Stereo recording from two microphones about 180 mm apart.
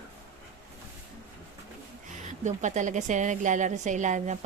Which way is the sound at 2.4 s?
40° right (ahead or behind).